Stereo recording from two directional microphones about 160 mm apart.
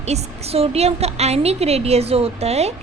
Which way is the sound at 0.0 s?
40° right (ahead or behind).